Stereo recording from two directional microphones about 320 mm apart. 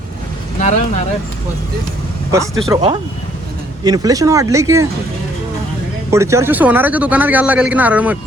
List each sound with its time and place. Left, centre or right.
0.6 s speech: left
2.3 s speech: centre
6.1 s speech: centre